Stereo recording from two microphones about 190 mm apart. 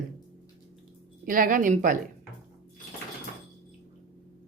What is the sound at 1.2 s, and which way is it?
Speech, 45° right (ahead or behind).